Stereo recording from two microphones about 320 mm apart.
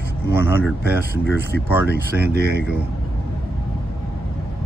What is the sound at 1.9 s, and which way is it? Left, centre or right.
Speech, right.